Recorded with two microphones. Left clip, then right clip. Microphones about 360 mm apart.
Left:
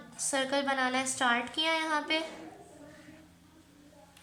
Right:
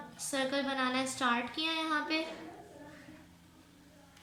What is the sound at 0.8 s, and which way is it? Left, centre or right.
A woman's voice, centre.